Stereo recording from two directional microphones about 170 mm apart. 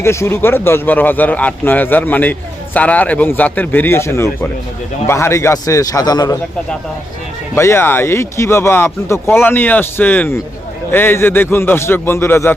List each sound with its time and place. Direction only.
0.0 s a man's voice: 15° left (ahead or behind)
7.5 s speech: 15° left (ahead or behind)